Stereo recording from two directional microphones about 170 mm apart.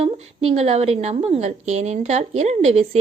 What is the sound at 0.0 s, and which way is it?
A woman's voice, 40° right (ahead or behind).